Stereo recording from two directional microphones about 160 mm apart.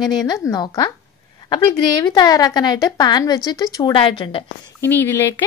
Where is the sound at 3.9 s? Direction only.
35° left (ahead or behind).